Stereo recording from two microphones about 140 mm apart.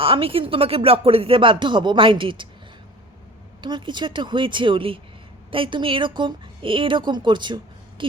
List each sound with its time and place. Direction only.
0.0 s speech: 40° right (ahead or behind)
3.6 s a woman's voice: 35° right (ahead or behind)